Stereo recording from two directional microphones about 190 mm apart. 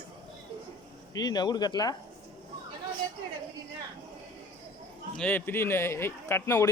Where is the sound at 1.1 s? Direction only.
20° left (ahead or behind).